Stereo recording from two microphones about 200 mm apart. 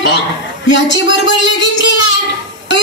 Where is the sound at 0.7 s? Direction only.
65° left (ahead or behind).